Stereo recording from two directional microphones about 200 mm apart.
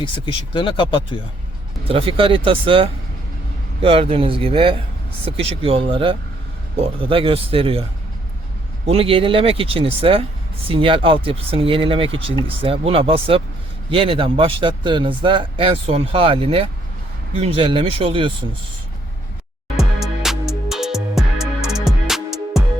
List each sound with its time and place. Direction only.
0.5 s speech: 25° left (ahead or behind)
1.9 s speech: 30° right (ahead or behind)
8.9 s speech: 25° right (ahead or behind)
19.8 s music: centre (ahead or behind)